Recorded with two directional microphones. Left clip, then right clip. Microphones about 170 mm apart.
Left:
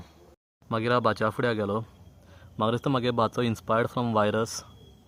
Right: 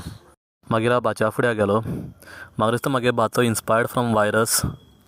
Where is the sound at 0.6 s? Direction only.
45° right (ahead or behind).